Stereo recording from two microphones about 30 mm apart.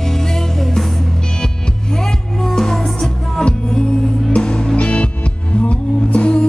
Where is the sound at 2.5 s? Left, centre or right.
Centre.